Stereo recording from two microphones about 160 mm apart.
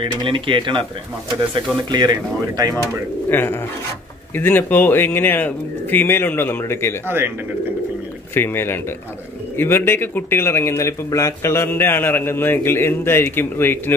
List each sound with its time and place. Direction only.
0.0 s speech: 30° right (ahead or behind)
1.9 s speech: 25° right (ahead or behind)
3.3 s speech: 15° left (ahead or behind)
7.1 s speech: 15° right (ahead or behind)
8.4 s speech: 15° left (ahead or behind)